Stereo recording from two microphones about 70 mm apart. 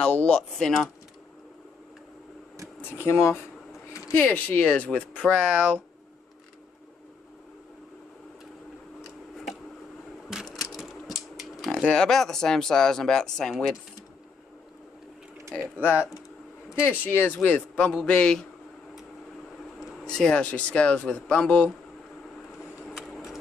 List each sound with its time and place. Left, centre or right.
0.0 s speech: left
2.9 s speech: left
5.4 s speech: centre
10.5 s typewriter: centre
11.8 s speech: centre
15.8 s speech: left
17.4 s speech: centre
20.1 s speech: centre
22.8 s a sound: centre